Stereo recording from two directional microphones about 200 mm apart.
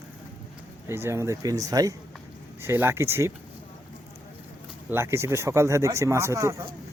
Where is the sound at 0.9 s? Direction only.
15° right (ahead or behind).